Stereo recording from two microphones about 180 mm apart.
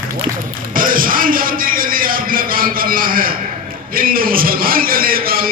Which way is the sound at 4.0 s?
55° right (ahead or behind).